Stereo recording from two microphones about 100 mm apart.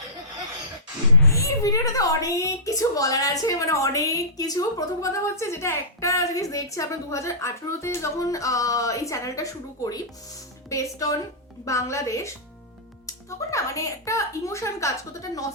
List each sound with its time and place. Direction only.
1.3 s a woman's voice: 35° left (ahead or behind)